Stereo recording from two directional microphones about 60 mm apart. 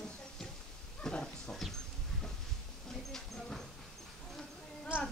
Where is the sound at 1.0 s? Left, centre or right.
Centre.